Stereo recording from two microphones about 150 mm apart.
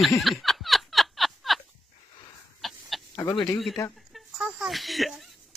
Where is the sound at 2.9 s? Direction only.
Centre (ahead or behind).